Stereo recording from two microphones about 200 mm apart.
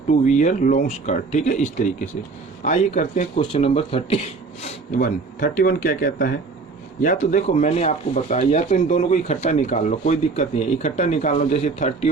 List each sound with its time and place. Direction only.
0.1 s speech: 40° left (ahead or behind)
4.6 s speech: 40° left (ahead or behind)